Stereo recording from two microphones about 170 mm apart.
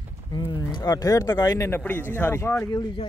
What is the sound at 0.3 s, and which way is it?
Speech, 25° left (ahead or behind).